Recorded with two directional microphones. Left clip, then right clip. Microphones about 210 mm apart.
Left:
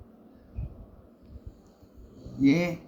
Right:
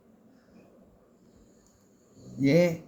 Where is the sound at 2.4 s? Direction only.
55° right (ahead or behind).